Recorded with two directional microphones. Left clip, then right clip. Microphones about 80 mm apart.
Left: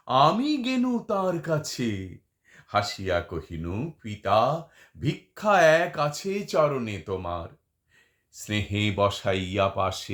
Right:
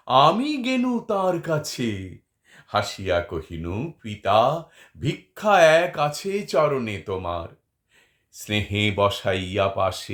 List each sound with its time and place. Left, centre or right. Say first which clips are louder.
0.0 s speech: right 4 dB; right; by 10.1 s centre